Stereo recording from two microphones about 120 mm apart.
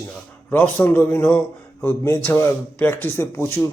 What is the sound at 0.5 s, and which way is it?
Speech, 15° left (ahead or behind).